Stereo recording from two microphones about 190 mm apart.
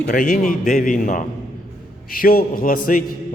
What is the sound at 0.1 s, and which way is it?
A man's voice, 45° left (ahead or behind).